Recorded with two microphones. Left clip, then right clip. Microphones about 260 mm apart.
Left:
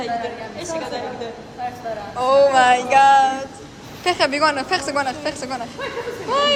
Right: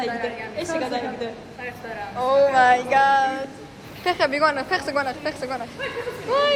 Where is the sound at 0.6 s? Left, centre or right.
Right.